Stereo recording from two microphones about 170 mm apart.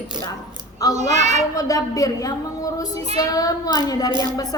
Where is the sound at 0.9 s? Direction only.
45° right (ahead or behind).